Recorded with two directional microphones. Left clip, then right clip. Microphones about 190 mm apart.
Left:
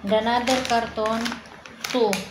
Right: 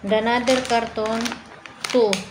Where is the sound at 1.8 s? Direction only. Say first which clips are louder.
Right 3 dB; 25° right (ahead or behind).